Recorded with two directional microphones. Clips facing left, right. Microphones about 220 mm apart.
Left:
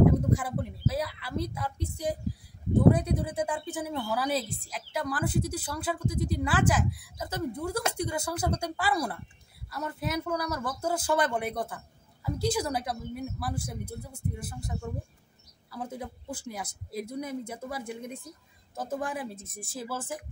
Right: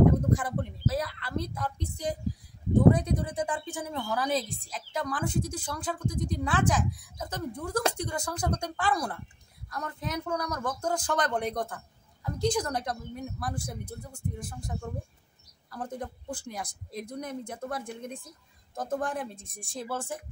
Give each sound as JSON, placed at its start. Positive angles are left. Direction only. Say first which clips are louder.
{"t": 0.0, "sound": "speech", "louder": "even", "side_deg": 5}